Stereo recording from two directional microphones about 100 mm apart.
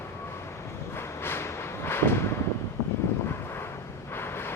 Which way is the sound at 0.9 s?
25° left (ahead or behind).